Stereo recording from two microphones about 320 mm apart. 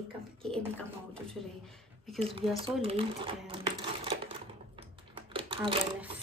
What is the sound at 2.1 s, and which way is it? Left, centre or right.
Speech, centre.